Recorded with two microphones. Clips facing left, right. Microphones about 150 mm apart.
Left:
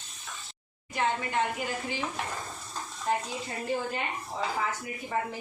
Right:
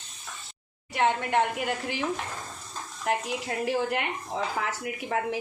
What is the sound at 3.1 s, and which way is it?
A woman's voice, 75° right (ahead or behind).